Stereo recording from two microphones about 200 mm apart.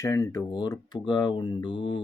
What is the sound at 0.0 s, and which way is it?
Speech, 15° left (ahead or behind).